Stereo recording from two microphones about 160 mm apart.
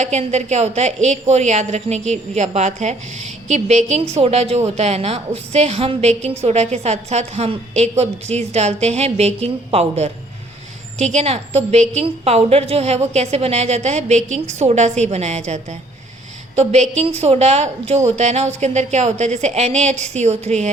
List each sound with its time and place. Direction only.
0.0 s a woman's voice: 45° right (ahead or behind)